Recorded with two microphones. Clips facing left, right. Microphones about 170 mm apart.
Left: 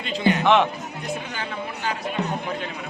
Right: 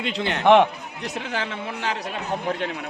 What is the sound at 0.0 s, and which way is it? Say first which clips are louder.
Speech: left 1 dB; 75° right (ahead or behind).